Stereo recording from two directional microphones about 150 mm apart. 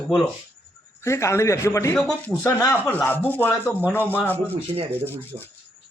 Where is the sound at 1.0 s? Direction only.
20° left (ahead or behind).